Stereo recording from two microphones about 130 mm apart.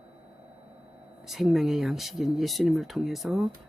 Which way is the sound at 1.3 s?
Centre (ahead or behind).